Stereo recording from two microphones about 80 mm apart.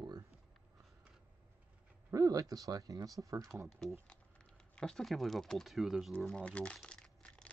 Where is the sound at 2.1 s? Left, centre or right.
Right.